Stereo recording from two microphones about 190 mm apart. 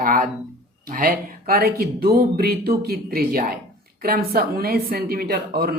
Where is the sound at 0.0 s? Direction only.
50° right (ahead or behind).